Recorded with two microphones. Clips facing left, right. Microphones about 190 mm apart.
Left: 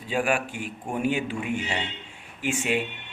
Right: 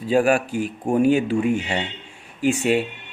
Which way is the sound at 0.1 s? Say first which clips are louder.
Right 8 dB; 40° right (ahead or behind).